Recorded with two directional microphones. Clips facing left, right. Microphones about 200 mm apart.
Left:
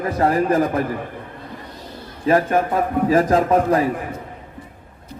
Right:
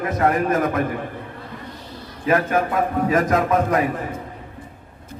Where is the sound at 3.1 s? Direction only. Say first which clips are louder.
Left 4 dB; 30° left (ahead or behind).